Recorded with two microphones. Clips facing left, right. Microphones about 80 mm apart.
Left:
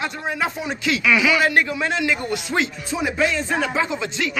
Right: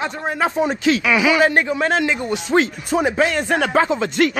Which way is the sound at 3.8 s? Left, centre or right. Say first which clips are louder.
Right 7 dB; right.